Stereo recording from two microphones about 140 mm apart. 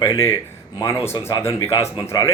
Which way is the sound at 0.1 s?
20° left (ahead or behind).